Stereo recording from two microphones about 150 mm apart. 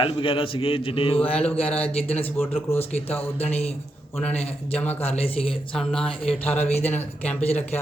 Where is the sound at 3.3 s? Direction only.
45° left (ahead or behind).